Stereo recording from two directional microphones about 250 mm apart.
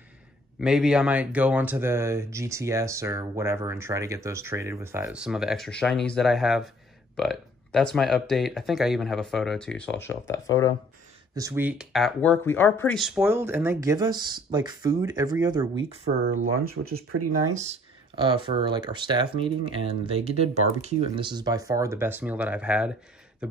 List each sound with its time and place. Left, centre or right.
0.6 s speech: centre
11.3 s speech: centre
15.8 s speech: right
16.7 s speech: right
17.6 s speech: right; by 22.9 s centre
23.4 s beatboxing: centre